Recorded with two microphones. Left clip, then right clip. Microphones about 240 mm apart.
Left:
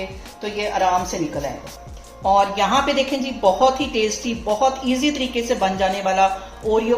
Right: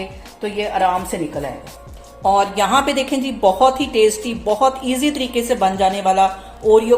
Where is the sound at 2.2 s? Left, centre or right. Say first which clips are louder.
Right 1 dB; right.